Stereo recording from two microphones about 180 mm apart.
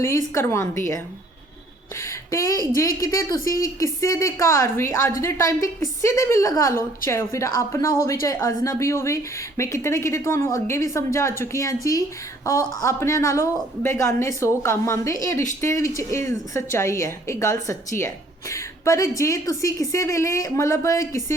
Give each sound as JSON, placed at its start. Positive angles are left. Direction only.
{"t": 0.0, "sound": "a woman's voice", "side_deg": 15}
{"t": 2.0, "sound": "a sound", "side_deg": 15}
{"t": 2.7, "sound": "a woman's voice", "side_deg": 20}